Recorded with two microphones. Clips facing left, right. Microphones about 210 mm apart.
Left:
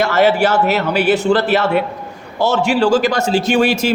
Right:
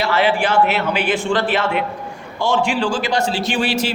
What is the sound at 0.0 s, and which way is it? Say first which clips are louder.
A man's voice: left 4 dB; 45° left (ahead or behind).